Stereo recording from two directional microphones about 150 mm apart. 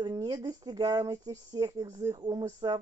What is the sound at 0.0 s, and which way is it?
A woman's voice, 25° right (ahead or behind).